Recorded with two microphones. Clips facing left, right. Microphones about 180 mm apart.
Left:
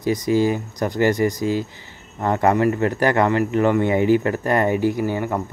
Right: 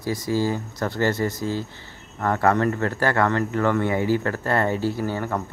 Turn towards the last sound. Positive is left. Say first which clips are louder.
# left 4 dB
turn(degrees=15)  # may be behind; listen again after turning